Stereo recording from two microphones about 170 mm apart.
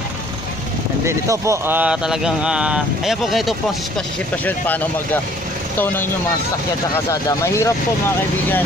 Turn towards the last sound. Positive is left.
turn(degrees=20)  # may be behind; listen again after turning